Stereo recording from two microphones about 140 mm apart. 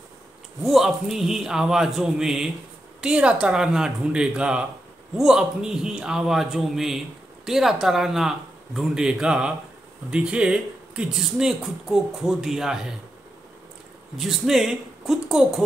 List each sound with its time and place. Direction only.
0.6 s speech: centre (ahead or behind)
14.1 s speech: centre (ahead or behind)